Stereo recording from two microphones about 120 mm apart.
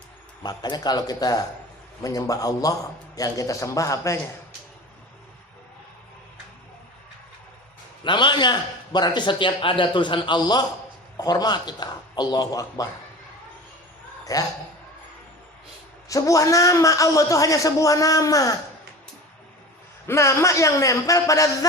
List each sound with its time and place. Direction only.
0.4 s a man's voice: 35° left (ahead or behind)
8.0 s a man's voice: 40° left (ahead or behind)
14.3 s a man's voice: 30° left (ahead or behind)
16.0 s a man's voice: 30° left (ahead or behind)
20.1 s a man's voice: 25° left (ahead or behind)